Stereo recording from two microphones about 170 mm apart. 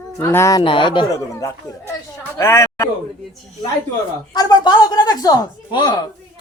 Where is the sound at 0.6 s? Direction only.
30° left (ahead or behind).